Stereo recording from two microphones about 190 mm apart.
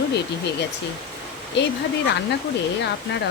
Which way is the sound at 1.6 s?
70° left (ahead or behind).